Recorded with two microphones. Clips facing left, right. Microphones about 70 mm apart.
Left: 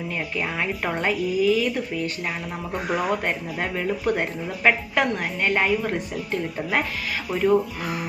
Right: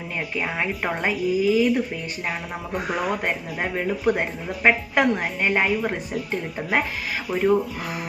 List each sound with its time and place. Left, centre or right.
0.3 s speech: centre
2.9 s speech: centre